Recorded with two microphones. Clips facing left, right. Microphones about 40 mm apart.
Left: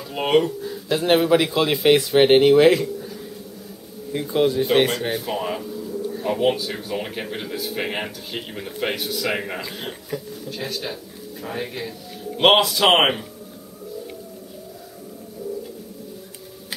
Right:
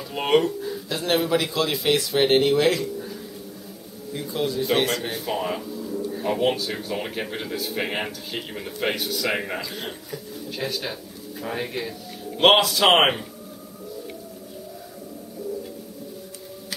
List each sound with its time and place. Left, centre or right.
0.1 s speech: centre
0.8 s speech: centre
4.1 s speech: left
5.1 s a man's voice: centre